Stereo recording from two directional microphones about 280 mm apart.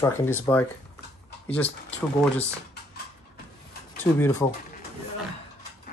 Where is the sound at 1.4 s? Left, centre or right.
Centre.